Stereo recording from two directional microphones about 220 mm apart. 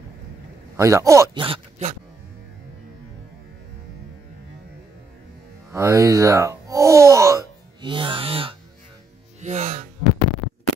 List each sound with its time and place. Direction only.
0.7 s speech: 15° right (ahead or behind)
5.7 s a sound: 15° right (ahead or behind)
9.4 s music: 30° right (ahead or behind)